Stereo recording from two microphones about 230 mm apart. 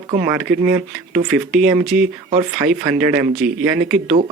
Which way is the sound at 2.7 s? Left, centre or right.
Centre.